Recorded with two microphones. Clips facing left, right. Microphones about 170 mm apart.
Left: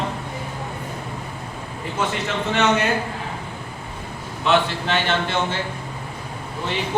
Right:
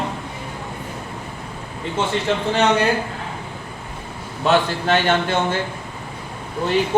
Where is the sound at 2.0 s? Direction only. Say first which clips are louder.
Right 1 dB; 25° right (ahead or behind).